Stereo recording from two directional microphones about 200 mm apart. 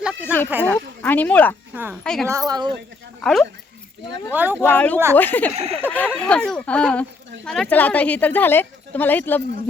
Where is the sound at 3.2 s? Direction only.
Centre (ahead or behind).